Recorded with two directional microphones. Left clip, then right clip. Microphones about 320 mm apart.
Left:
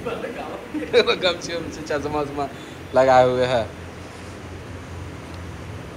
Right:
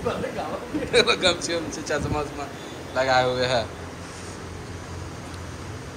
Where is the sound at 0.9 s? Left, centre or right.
Centre.